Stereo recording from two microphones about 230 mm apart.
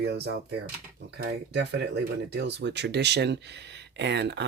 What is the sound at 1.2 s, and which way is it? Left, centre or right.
Speech, right.